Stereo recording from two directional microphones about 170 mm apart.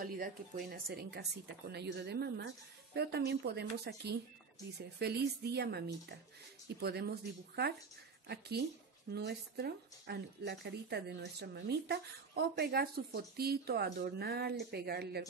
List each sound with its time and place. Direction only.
0.0 s speech: 60° right (ahead or behind)